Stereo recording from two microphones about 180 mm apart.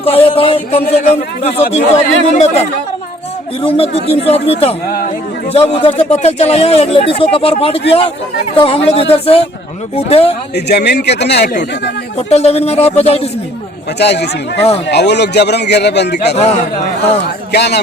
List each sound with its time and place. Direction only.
0.0 s speech: 30° left (ahead or behind)
4.9 s speech: 55° left (ahead or behind)
5.5 s speech: 35° left (ahead or behind)
10.5 s a man's voice: 70° left (ahead or behind)
12.1 s speech: 35° left (ahead or behind)
14.0 s a man's voice: 70° left (ahead or behind)
16.3 s speech: 35° left (ahead or behind)
17.5 s a man's voice: 65° left (ahead or behind)